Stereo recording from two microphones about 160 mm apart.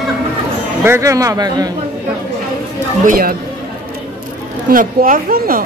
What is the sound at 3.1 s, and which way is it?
Speech, 65° right (ahead or behind).